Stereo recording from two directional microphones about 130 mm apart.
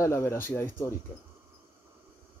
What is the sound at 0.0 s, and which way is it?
Speech, 20° left (ahead or behind).